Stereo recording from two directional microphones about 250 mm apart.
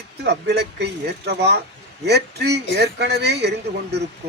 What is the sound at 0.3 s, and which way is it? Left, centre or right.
Speech, right.